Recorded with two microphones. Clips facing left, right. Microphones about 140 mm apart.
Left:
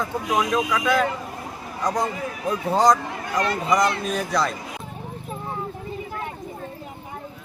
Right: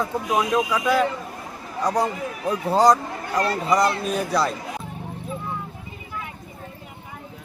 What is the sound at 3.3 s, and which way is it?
Speech, 35° right (ahead or behind).